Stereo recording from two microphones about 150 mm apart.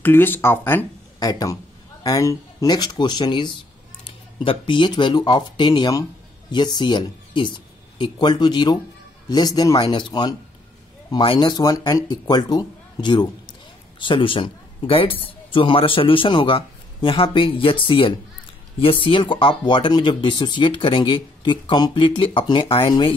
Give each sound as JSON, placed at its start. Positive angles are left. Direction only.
{"t": 0.0, "sound": "speech", "side_deg": 15}